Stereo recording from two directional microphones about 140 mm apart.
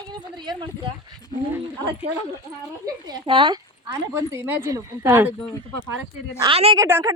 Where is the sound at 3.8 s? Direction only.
20° right (ahead or behind).